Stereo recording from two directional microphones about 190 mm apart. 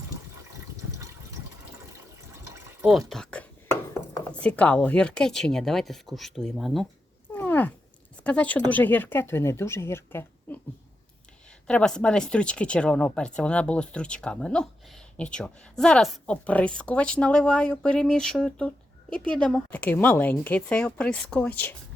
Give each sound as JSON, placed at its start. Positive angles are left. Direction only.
{"t": 0.9, "sound": "water", "side_deg": -15}
{"t": 3.1, "sound": "speech", "side_deg": 5}
{"t": 7.3, "sound": "a sound", "side_deg": 10}
{"t": 8.2, "sound": "speech", "side_deg": 5}
{"t": 11.7, "sound": "a woman's voice", "side_deg": 5}